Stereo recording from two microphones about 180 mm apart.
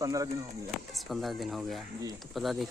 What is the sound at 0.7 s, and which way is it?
Speech, centre (ahead or behind).